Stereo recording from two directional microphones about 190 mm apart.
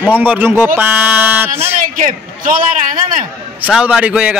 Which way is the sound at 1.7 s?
45° right (ahead or behind).